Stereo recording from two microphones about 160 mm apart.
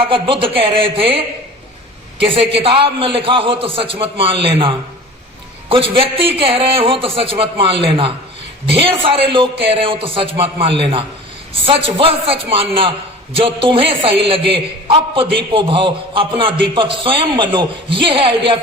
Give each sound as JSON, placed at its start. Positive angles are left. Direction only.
{"t": 0.0, "sound": "a man's voice", "side_deg": -35}
{"t": 2.5, "sound": "a man's voice", "side_deg": -35}